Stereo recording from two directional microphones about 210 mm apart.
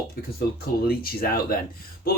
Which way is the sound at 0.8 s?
45° left (ahead or behind).